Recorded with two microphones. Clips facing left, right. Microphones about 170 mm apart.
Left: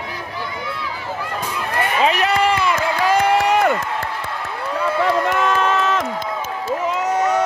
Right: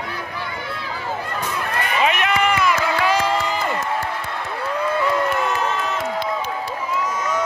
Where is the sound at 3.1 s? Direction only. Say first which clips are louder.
Left 5 dB; 65° left (ahead or behind).